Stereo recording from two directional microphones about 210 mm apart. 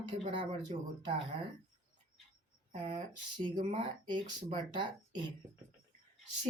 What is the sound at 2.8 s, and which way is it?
Speech, 20° right (ahead or behind).